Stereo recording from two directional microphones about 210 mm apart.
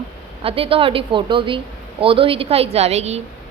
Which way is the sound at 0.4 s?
25° right (ahead or behind).